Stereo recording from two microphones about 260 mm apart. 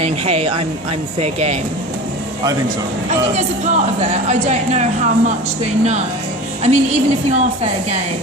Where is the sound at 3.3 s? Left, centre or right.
Right.